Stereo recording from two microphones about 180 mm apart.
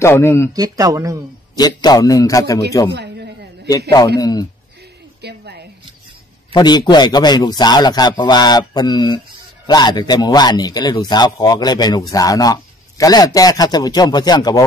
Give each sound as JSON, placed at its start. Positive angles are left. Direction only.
{"t": 0.0, "sound": "speech", "side_deg": 15}
{"t": 0.5, "sound": "speech", "side_deg": -20}
{"t": 1.6, "sound": "a man's voice", "side_deg": 20}
{"t": 2.9, "sound": "a sound", "side_deg": -65}
{"t": 4.2, "sound": "a man's voice", "side_deg": 20}
{"t": 5.2, "sound": "a sound", "side_deg": -65}
{"t": 6.5, "sound": "a man's voice", "side_deg": 25}